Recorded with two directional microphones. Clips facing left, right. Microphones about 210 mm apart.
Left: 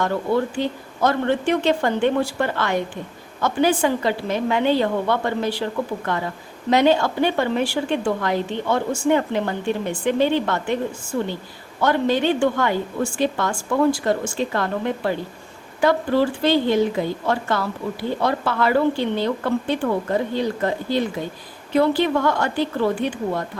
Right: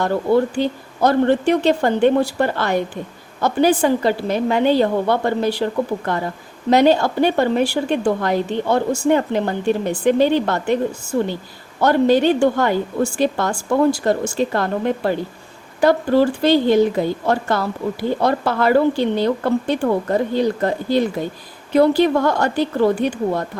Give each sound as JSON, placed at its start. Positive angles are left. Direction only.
{"t": 1.0, "sound": "a woman's voice", "side_deg": -35}
{"t": 6.7, "sound": "a woman's voice", "side_deg": -40}